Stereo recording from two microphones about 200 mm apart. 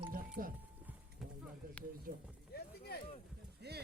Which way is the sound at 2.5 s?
50° left (ahead or behind).